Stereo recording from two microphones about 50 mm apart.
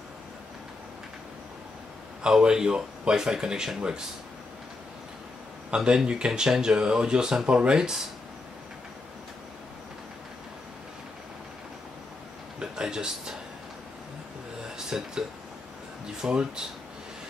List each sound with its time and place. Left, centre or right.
2.2 s speech: centre
5.7 s speech: centre
12.5 s a sound: centre
14.9 s speech: centre